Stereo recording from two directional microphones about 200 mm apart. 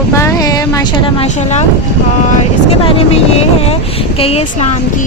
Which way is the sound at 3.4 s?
30° left (ahead or behind).